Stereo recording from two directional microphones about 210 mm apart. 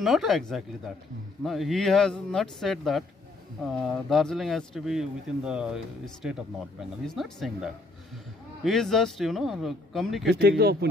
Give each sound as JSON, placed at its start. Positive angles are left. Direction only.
{"t": 0.0, "sound": "speech", "side_deg": 0}
{"t": 10.4, "sound": "speech", "side_deg": -50}